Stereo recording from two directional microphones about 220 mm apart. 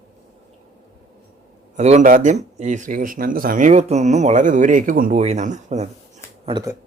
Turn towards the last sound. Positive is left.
turn(degrees=-15)  # may be behind; listen again after turning